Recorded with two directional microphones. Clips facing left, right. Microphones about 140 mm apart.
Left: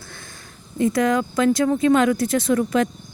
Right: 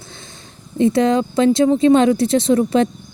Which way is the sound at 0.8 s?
25° right (ahead or behind).